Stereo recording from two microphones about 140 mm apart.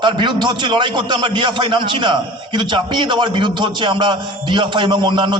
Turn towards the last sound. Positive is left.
turn(degrees=-35)  # may be behind; listen again after turning